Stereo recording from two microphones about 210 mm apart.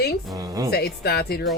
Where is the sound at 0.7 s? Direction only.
50° left (ahead or behind).